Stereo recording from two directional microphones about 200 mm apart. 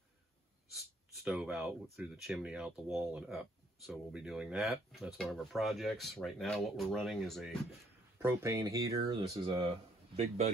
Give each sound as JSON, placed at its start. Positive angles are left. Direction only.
{"t": 0.7, "sound": "speech", "side_deg": -5}
{"t": 8.2, "sound": "speech", "side_deg": -15}